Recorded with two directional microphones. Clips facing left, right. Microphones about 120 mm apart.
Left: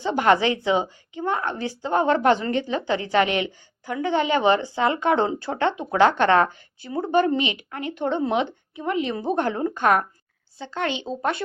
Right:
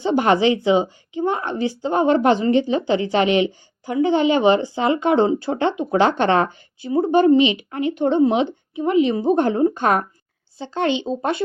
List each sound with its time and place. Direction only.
0.0 s a woman's voice: 20° right (ahead or behind)